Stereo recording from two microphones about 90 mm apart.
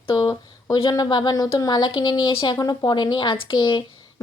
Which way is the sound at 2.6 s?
45° left (ahead or behind).